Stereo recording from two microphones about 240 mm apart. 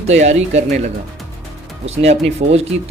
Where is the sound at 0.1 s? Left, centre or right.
Right.